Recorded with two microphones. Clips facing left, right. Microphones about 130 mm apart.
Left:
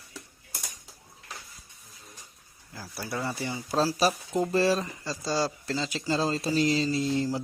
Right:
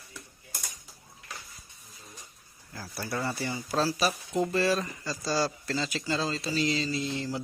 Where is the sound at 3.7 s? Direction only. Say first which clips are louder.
Left 3 dB; 30° left (ahead or behind).